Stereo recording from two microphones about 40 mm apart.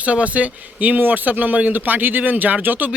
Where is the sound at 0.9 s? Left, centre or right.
Right.